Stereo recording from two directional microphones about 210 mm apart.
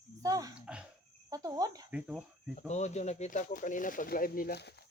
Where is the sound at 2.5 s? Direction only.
35° left (ahead or behind).